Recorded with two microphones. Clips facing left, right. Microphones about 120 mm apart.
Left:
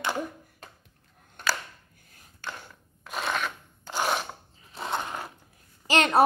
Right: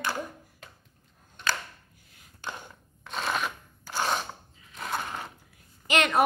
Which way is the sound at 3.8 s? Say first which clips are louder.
Left 1 dB; 15° left (ahead or behind).